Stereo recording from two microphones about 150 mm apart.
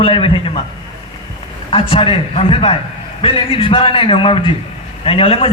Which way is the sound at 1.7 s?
35° left (ahead or behind).